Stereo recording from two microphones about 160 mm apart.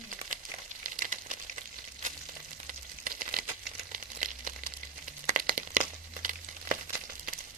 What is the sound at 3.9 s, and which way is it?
Crumpling, 55° right (ahead or behind).